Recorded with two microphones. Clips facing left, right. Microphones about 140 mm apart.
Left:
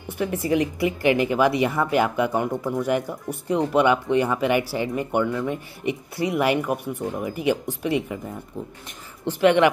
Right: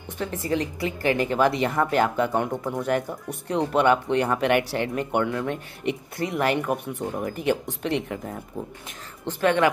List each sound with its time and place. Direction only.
0.2 s a woman's voice: 15° left (ahead or behind)
9.2 s a woman's voice: 15° left (ahead or behind)